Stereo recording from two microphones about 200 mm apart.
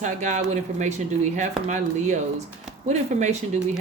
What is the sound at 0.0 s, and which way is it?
Speech, 35° right (ahead or behind).